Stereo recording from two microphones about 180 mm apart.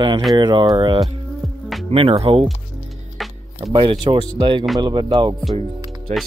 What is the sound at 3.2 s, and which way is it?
Music, centre (ahead or behind).